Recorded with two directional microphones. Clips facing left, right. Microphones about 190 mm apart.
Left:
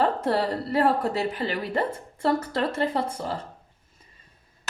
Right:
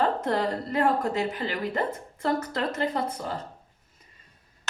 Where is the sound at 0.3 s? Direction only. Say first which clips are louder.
Left 2 dB; 35° left (ahead or behind).